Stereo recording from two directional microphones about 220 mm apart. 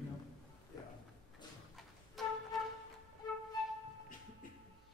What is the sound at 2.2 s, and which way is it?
Flute, centre (ahead or behind).